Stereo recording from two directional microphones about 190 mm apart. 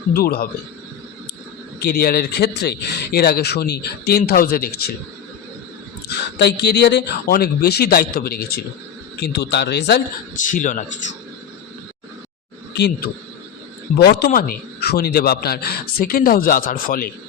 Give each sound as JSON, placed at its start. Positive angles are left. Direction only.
{"t": 0.1, "sound": "speech", "side_deg": 55}
{"t": 1.8, "sound": "a man's voice", "side_deg": 50}
{"t": 6.4, "sound": "a man's voice", "side_deg": 65}
{"t": 10.3, "sound": "speech", "side_deg": 40}
{"t": 12.7, "sound": "a man's voice", "side_deg": 60}